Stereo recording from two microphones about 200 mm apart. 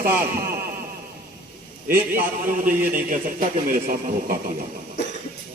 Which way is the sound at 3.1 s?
40° right (ahead or behind).